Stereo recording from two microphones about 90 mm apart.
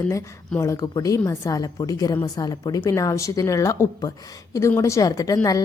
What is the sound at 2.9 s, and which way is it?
A woman's voice, 35° left (ahead or behind).